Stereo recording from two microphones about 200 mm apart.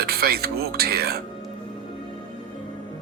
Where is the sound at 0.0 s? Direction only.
50° right (ahead or behind).